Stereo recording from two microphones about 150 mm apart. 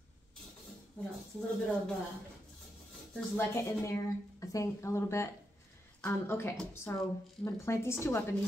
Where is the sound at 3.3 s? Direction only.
20° left (ahead or behind).